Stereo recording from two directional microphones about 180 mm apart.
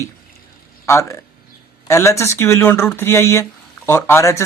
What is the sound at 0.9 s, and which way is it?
Speech, 15° left (ahead or behind).